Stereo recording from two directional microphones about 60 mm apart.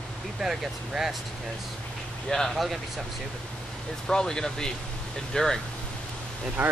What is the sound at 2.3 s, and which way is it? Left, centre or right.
Speech, centre.